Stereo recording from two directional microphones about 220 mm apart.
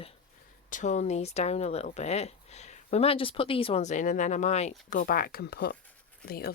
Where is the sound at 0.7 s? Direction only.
35° left (ahead or behind).